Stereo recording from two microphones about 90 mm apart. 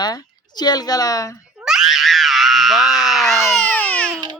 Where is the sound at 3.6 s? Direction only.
15° left (ahead or behind).